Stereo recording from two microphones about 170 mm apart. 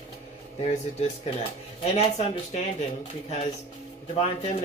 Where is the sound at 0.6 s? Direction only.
40° left (ahead or behind).